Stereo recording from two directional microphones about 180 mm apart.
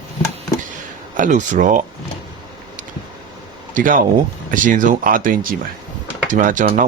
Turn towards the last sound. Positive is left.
turn(degrees=-45)  # may be behind; listen again after turning